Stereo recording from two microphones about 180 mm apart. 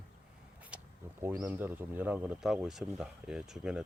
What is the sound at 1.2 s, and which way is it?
Speech, 15° right (ahead or behind).